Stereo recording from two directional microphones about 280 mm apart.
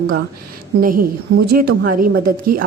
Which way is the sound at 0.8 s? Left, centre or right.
Right.